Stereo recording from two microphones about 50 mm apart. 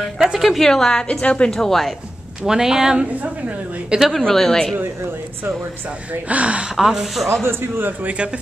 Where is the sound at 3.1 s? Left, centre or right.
Right.